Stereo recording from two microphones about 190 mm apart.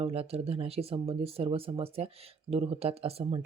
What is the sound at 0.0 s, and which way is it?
Speech, 30° right (ahead or behind).